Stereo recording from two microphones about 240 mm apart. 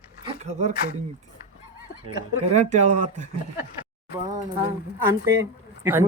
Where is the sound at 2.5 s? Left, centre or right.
Right.